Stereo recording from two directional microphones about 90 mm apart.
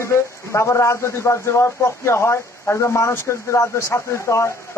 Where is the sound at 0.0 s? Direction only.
30° left (ahead or behind).